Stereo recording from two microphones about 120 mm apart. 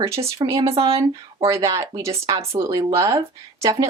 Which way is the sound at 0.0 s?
25° right (ahead or behind).